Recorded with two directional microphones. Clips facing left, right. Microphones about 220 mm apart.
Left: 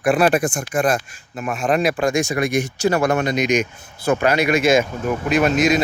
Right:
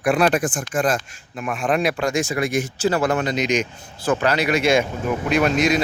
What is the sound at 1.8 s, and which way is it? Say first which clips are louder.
Speech: left 3 dB; 50° left (ahead or behind).